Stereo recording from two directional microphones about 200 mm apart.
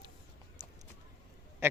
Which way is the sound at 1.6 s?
10° right (ahead or behind).